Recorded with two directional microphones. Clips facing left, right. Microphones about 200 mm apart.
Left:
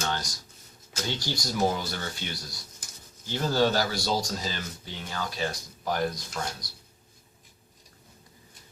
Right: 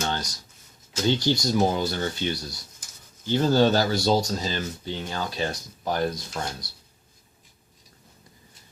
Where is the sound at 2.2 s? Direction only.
25° right (ahead or behind).